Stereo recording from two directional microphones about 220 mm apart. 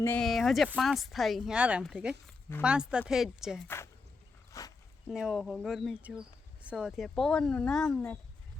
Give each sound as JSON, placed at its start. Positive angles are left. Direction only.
{"t": 0.0, "sound": "speech", "side_deg": 5}
{"t": 4.5, "sound": "a sound", "side_deg": 15}
{"t": 5.1, "sound": "speech", "side_deg": 0}